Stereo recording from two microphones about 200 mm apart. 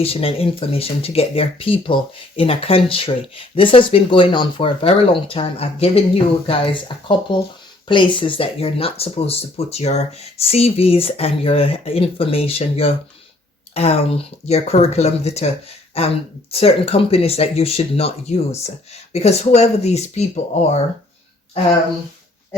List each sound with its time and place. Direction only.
0.0 s speech: 30° left (ahead or behind)